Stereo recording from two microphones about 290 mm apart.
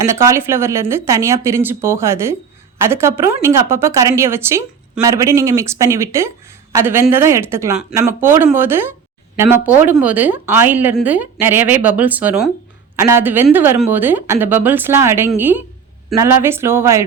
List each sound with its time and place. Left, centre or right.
0.0 s a woman's voice: centre